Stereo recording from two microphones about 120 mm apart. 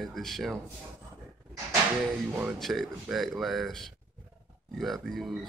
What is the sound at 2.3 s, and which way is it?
Speech, 15° right (ahead or behind).